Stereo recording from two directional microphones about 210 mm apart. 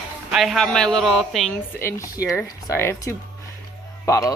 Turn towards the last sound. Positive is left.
turn(degrees=15)  # may be behind; listen again after turning